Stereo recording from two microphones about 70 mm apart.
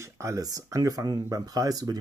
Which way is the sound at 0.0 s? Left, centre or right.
Right.